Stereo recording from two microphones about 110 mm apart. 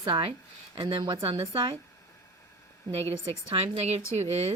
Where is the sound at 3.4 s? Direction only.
45° right (ahead or behind).